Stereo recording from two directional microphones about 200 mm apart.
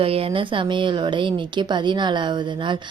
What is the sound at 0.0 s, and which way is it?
A woman's voice, 30° right (ahead or behind).